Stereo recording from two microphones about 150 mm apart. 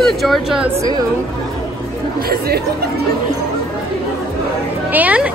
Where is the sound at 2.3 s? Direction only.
90° right.